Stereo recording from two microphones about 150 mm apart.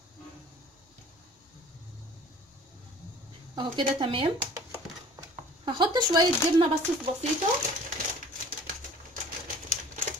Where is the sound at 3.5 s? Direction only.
35° right (ahead or behind).